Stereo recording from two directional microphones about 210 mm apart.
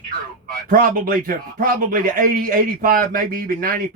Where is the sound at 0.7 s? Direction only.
40° right (ahead or behind).